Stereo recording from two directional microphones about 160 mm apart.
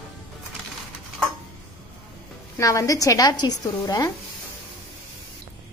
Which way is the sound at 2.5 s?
20° left (ahead or behind).